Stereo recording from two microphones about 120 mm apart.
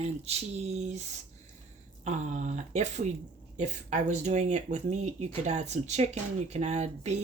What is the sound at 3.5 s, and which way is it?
Speech, 85° right.